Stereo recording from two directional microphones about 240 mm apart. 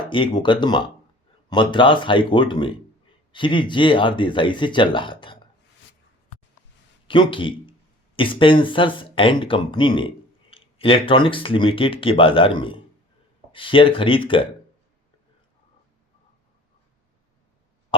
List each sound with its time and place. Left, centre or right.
0.0 s speech: centre
7.1 s speech: left